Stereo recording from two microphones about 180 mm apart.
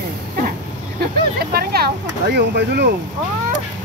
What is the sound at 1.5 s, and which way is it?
Speech, 60° right (ahead or behind).